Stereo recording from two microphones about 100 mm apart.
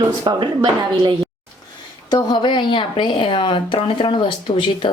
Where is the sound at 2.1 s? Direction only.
45° left (ahead or behind).